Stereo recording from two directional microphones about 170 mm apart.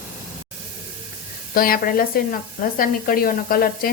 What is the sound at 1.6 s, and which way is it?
Speech, 60° left (ahead or behind).